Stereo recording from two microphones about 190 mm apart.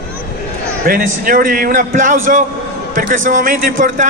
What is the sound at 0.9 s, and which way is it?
A man's voice, 50° right (ahead or behind).